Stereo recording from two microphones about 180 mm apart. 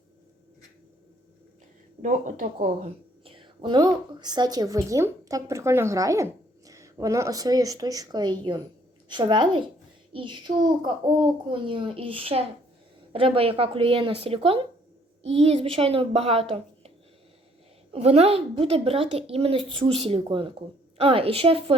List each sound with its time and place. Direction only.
2.0 s a woman's voice: 45° right (ahead or behind)
17.9 s a woman's voice: 35° right (ahead or behind)